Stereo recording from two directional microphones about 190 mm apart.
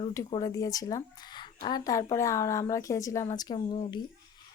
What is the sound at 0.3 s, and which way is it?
A woman's voice, 20° left (ahead or behind).